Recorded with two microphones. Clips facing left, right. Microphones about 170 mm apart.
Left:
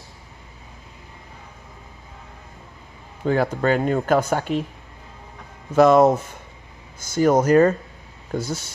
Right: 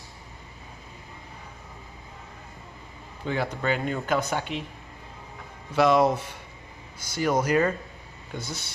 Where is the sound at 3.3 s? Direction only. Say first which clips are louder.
Left 7 dB; 45° left (ahead or behind).